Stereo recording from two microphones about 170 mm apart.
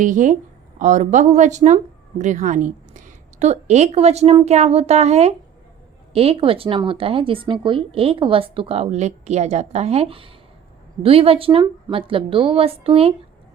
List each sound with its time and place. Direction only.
0.0 s a woman's voice: 50° right (ahead or behind)